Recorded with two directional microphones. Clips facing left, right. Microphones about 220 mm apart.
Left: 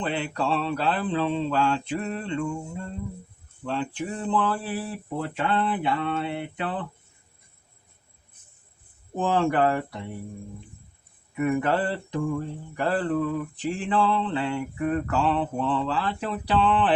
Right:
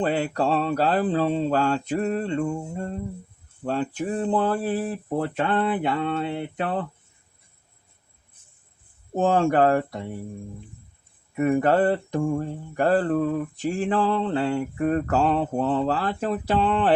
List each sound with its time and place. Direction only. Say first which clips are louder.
0.0 s mantra: right 5 dB; 40° right (ahead or behind)
9.1 s mantra: right 3 dB; 45° right (ahead or behind)
11.3 s mantra: right 4 dB; 40° right (ahead or behind)